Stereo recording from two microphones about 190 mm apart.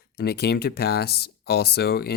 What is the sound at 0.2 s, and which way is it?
Speech, 55° left (ahead or behind).